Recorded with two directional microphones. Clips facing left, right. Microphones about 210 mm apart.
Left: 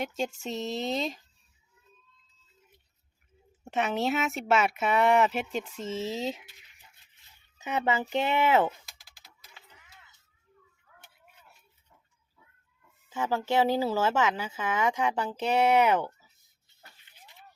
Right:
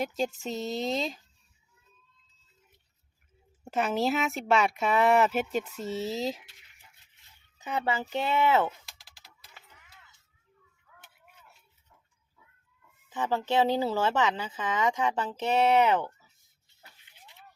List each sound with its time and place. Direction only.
0.0 s speech: centre (ahead or behind)
3.6 s speech: centre (ahead or behind)
7.6 s speech: 20° left (ahead or behind)
13.1 s speech: 10° left (ahead or behind)